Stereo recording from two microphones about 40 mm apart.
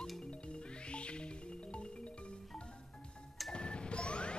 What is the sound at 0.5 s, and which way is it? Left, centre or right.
Music, left.